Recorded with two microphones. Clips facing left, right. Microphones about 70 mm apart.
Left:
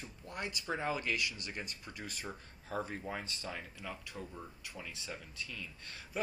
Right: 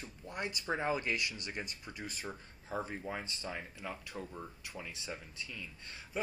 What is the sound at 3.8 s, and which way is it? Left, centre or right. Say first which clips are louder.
Speech: right 2 dB; right.